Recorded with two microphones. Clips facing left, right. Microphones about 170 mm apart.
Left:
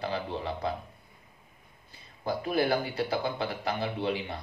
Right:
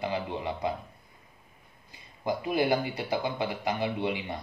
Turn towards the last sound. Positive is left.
turn(degrees=-15)  # may be behind; listen again after turning